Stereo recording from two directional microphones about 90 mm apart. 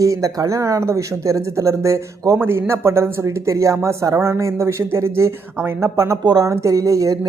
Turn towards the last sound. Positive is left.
turn(degrees=-40)  # may be behind; listen again after turning